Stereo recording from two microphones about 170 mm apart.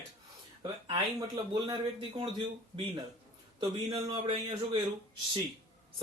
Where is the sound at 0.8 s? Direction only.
25° right (ahead or behind).